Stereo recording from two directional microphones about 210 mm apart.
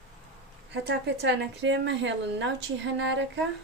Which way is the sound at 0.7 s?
55° right (ahead or behind).